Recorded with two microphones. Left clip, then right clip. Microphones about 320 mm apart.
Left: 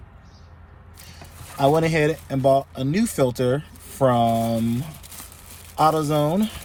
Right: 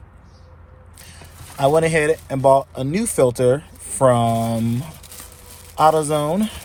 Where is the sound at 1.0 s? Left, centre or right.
Right.